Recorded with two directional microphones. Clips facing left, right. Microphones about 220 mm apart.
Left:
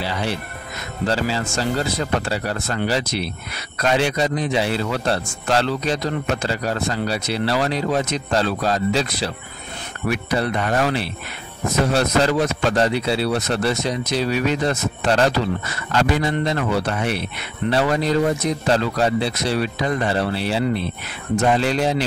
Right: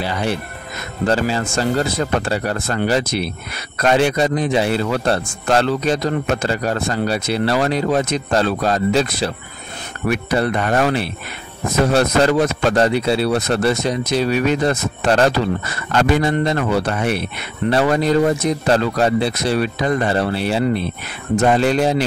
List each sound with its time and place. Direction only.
0.0 s a man's voice: 50° right (ahead or behind)